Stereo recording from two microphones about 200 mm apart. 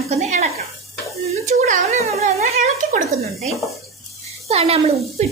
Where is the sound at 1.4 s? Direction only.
35° right (ahead or behind).